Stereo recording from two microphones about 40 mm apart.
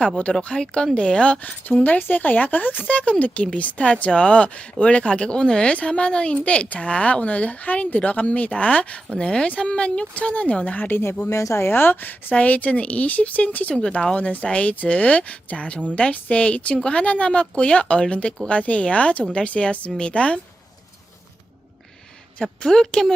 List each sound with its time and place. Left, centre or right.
0.4 s speech: left
1.8 s a woman's voice: left
10.8 s speech: left
11.6 s speech: left
12.3 s a woman's voice: left
13.8 s a woman's voice: left
22.7 s speech: centre